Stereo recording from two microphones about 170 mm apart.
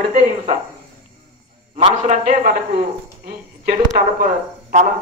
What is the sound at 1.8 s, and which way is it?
Speech, 45° right (ahead or behind).